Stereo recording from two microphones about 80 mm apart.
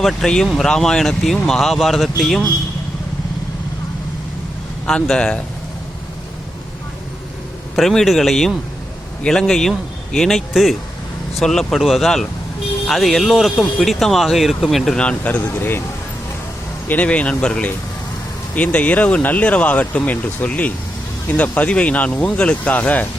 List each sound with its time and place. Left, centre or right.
0.0 s speech: centre
4.9 s speech: centre
7.8 s speech: centre
15.0 s speech: centre
16.9 s speech: centre